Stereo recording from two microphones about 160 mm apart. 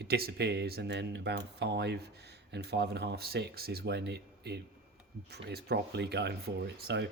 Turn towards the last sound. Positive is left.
turn(degrees=-90)